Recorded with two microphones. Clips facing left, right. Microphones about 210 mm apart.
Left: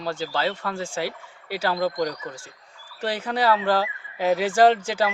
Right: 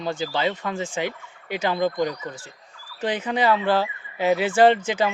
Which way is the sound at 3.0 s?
15° right (ahead or behind).